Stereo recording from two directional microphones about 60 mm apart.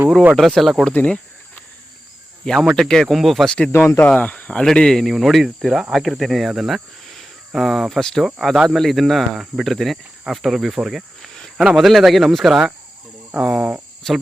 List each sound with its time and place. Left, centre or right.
0.3 s speech: centre
0.9 s a sound: left
2.7 s speech: centre
3.7 s speech: left
4.2 s speech: left
4.6 s speech: centre
5.0 s speech: centre
13.3 s speech: right
14.0 s speech: centre